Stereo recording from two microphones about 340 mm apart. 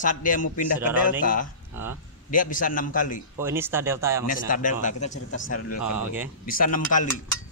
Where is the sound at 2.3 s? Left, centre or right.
Left.